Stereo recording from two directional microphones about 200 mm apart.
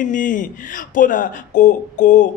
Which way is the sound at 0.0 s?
40° left (ahead or behind).